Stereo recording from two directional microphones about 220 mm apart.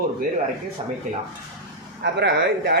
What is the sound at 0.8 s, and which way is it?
Speech, 25° right (ahead or behind).